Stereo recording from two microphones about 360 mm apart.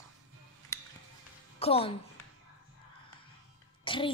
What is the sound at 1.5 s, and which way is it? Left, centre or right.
Speech, centre.